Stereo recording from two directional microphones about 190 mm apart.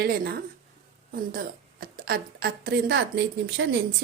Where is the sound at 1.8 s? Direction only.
50° right (ahead or behind).